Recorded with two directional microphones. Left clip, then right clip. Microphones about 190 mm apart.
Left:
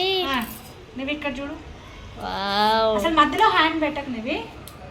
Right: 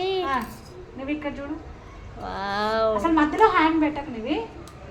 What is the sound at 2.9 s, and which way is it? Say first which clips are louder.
Speech: left 2 dB; 30° right (ahead or behind).